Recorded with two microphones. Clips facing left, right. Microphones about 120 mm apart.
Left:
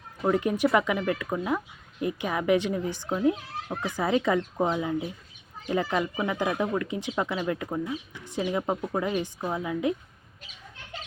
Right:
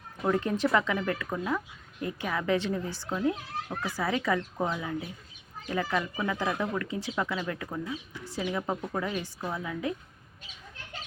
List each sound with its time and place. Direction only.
0.2 s speech: 10° left (ahead or behind)